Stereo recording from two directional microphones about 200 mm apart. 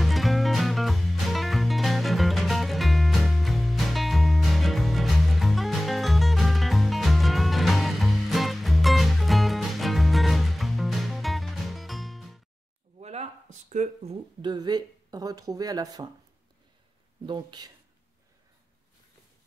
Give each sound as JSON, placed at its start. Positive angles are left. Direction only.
{"t": 0.0, "sound": "music", "side_deg": 0}
{"t": 13.0, "sound": "a sound", "side_deg": -35}
{"t": 14.4, "sound": "speech", "side_deg": -20}
{"t": 17.3, "sound": "speech", "side_deg": -20}